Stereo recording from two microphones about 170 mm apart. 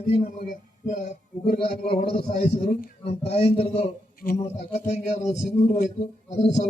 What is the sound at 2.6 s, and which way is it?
Speech, 50° left (ahead or behind).